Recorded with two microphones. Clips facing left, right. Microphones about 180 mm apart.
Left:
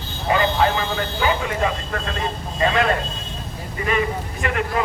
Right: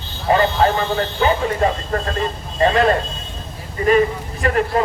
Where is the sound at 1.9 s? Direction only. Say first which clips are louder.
Right 5 dB; 40° right (ahead or behind).